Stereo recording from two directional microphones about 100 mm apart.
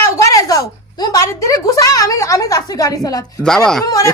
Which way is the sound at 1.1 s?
35° left (ahead or behind).